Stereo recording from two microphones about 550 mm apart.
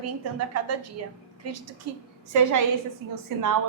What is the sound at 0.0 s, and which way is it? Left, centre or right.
Speech, right.